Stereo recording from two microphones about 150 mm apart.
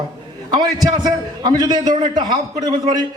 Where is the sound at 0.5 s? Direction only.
25° right (ahead or behind).